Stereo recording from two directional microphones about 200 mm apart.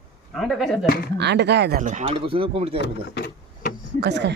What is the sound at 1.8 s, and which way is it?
Speech, 35° right (ahead or behind).